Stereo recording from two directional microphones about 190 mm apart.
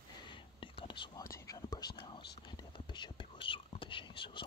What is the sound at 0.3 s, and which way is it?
Whispering, 25° left (ahead or behind).